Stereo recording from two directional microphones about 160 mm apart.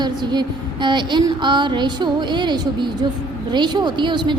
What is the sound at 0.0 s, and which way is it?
A woman's voice, 25° right (ahead or behind).